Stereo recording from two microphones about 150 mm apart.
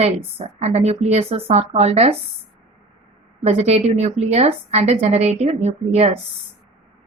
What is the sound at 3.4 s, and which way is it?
A woman's voice, 45° right (ahead or behind).